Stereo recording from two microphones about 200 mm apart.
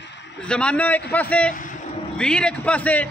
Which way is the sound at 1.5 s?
40° left (ahead or behind).